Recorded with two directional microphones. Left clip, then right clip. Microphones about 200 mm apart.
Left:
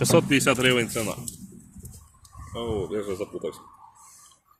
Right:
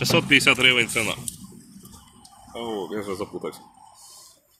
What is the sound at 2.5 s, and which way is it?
Speech, 30° right (ahead or behind).